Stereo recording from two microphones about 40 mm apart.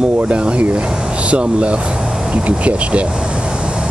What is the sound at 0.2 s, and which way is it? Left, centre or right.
Speech, right.